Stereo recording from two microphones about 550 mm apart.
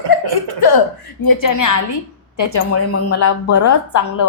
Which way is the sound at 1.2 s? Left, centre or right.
Left.